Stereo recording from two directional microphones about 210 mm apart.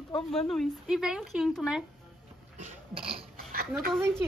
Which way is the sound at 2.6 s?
30° right (ahead or behind).